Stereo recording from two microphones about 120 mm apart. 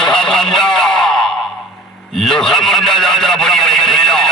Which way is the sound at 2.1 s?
5° left (ahead or behind).